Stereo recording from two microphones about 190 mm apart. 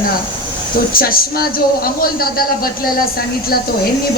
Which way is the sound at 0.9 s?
50° left (ahead or behind).